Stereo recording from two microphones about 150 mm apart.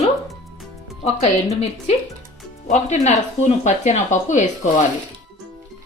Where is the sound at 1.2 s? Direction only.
45° left (ahead or behind).